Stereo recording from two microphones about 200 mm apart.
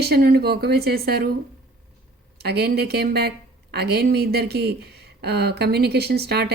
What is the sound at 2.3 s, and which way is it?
Speech, 55° right (ahead or behind).